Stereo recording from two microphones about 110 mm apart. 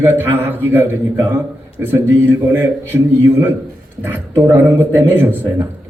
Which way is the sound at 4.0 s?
20° right (ahead or behind).